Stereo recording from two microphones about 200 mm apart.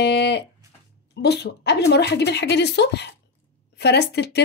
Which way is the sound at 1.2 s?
55° left (ahead or behind).